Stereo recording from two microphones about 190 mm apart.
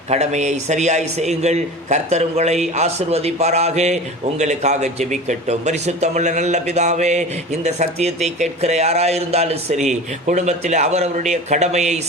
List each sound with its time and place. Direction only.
0.1 s a man's voice: 35° right (ahead or behind)